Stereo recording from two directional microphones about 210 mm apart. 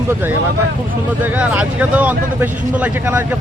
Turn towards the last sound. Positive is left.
turn(degrees=-10)  # may be behind; listen again after turning